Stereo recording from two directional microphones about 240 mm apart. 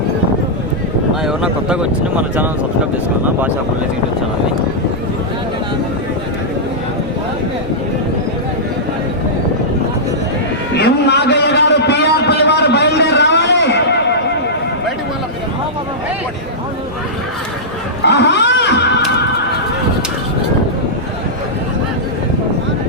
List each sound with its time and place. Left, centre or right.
1.2 s speech: centre
10.8 s a sound: left
18.0 s neigh: left